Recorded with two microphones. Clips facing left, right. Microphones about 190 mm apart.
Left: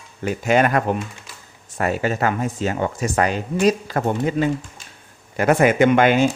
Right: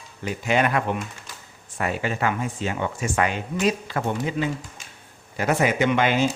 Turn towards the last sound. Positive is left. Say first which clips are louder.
# left 6 dB
turn(degrees=50)  # may be behind; listen again after turning